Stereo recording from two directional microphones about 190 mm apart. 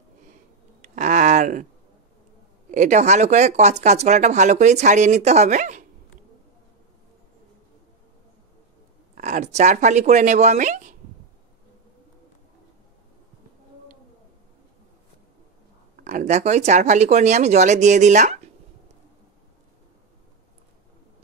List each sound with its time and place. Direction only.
0.8 s a sound: 40° right (ahead or behind)
2.7 s speech: 40° right (ahead or behind)
9.1 s speech: 40° right (ahead or behind)
16.0 s speech: 40° right (ahead or behind)